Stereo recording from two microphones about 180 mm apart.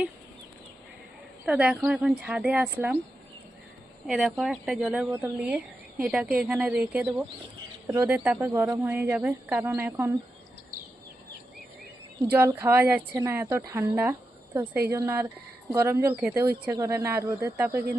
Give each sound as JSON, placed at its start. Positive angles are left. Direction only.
{"t": 1.5, "sound": "speech", "side_deg": -5}
{"t": 4.0, "sound": "speech", "side_deg": -5}
{"t": 12.2, "sound": "speech", "side_deg": -10}